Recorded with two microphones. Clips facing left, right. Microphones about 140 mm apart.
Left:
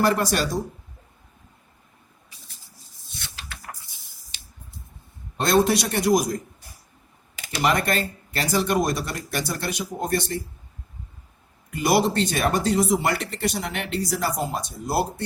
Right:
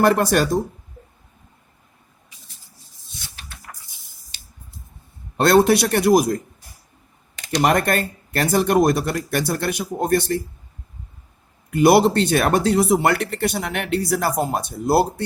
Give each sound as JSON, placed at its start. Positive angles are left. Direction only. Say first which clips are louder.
{"t": 0.0, "sound": "speech", "louder": "right 5 dB", "side_deg": -55}
{"t": 3.2, "sound": "a sound", "louder": "left 2 dB", "side_deg": 90}
{"t": 5.4, "sound": "speech", "louder": "right 5 dB", "side_deg": -65}
{"t": 7.5, "sound": "speech", "louder": "right 4 dB", "side_deg": -50}
{"t": 11.7, "sound": "speech", "louder": "right 7 dB", "side_deg": -60}